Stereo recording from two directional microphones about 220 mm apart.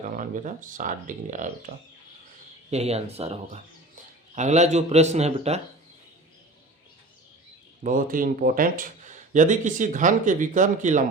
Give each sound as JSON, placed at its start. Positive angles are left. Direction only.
{"t": 0.2, "sound": "speech", "side_deg": -35}
{"t": 7.9, "sound": "speech", "side_deg": -40}